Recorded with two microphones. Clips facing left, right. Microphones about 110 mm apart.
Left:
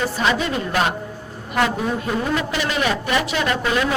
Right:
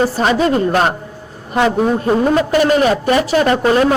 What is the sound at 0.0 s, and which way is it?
A man's voice, 40° right (ahead or behind).